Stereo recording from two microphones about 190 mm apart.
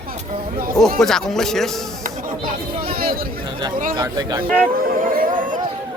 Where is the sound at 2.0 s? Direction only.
45° right (ahead or behind).